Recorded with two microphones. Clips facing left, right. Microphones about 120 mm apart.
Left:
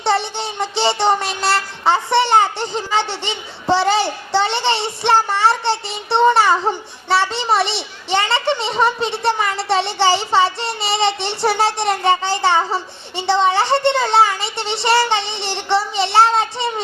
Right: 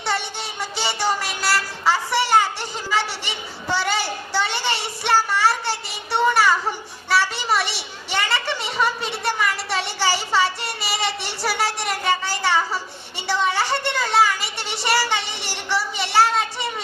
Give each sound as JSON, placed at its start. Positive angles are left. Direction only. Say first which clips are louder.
{"t": 0.0, "sound": "speech", "louder": "left 7 dB", "side_deg": 25}